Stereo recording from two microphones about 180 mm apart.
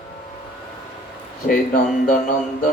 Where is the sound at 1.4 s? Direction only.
50° left (ahead or behind).